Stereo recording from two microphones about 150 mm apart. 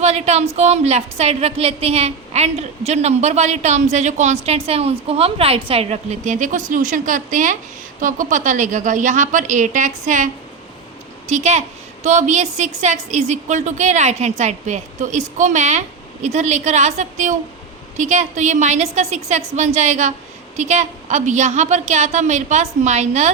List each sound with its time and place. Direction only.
0.0 s a woman's voice: 45° right (ahead or behind)
11.3 s a woman's voice: 50° right (ahead or behind)